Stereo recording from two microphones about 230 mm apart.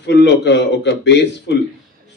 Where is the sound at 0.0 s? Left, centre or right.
Left.